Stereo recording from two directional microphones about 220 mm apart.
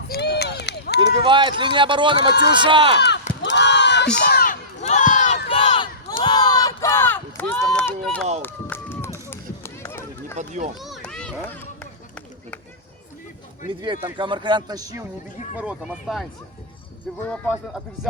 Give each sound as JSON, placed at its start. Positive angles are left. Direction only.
{"t": 0.1, "sound": "run", "side_deg": 50}
{"t": 1.1, "sound": "speech", "side_deg": -20}
{"t": 3.4, "sound": "a sound", "side_deg": 50}
{"t": 4.8, "sound": "crowd", "side_deg": 35}
{"t": 6.1, "sound": "a sound", "side_deg": 20}
{"t": 8.4, "sound": "run", "side_deg": 10}
{"t": 10.3, "sound": "speech", "side_deg": -35}
{"t": 10.8, "sound": "children playing", "side_deg": 0}
{"t": 13.7, "sound": "a man's voice", "side_deg": -20}